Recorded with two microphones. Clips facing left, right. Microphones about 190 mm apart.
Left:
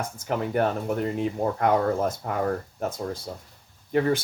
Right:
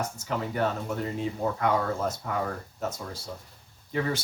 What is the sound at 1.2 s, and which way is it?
Speech, 55° left (ahead or behind).